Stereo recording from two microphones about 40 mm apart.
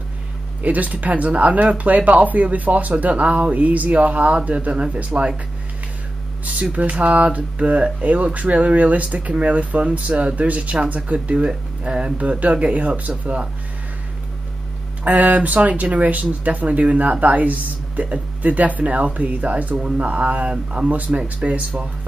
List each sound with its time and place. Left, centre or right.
0.6 s speech: right
6.4 s speech: right
11.3 s speech: right
15.0 s speech: right